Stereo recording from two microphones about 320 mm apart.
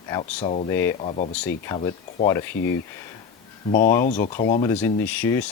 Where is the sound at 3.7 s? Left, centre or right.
Left.